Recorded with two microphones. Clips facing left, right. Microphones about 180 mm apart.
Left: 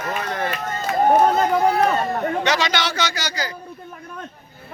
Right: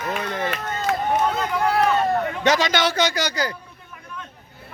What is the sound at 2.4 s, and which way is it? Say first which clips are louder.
A man's voice: right 2 dB; 50° right (ahead or behind).